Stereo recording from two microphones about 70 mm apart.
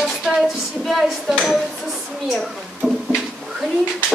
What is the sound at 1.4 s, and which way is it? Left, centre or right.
Dishes, centre.